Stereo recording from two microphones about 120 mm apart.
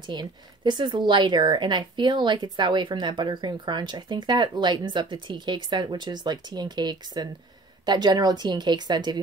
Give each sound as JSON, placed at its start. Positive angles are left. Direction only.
{"t": 0.0, "sound": "speech", "side_deg": -40}